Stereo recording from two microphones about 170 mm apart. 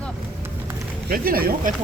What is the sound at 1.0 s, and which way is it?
Speech, 60° right (ahead or behind).